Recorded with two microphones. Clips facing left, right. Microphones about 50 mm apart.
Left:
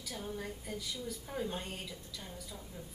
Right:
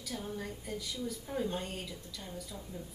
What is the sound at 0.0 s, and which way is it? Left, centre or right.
Speech, centre.